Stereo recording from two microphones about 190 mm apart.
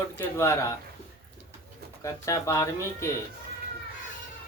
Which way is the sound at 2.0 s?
15° left (ahead or behind).